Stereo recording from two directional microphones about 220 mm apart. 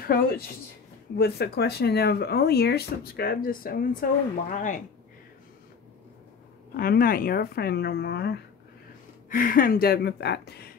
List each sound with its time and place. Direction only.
1.1 s speech: 45° left (ahead or behind)
6.8 s speech: 40° left (ahead or behind)